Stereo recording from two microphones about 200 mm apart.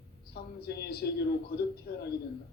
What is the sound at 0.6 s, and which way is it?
Speech, 55° left (ahead or behind).